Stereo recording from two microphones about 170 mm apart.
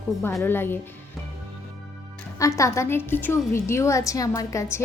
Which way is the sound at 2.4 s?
20° left (ahead or behind).